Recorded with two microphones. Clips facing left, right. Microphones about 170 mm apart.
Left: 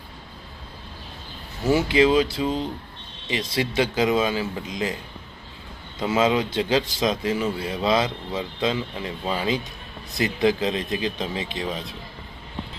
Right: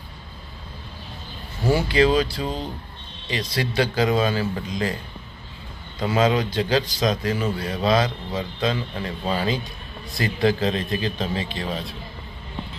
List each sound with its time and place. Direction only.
1.7 s speech: 20° left (ahead or behind)
6.0 s speech: 25° left (ahead or behind)